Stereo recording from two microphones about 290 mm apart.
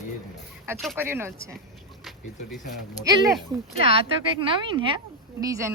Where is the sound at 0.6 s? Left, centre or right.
Centre.